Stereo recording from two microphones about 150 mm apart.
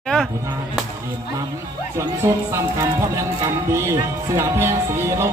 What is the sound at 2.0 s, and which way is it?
Speech, 20° right (ahead or behind).